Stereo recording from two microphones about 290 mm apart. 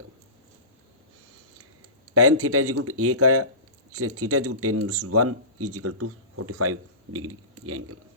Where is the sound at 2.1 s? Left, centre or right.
Right.